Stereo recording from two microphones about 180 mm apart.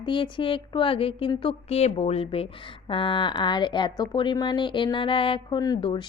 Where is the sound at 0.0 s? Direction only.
25° left (ahead or behind).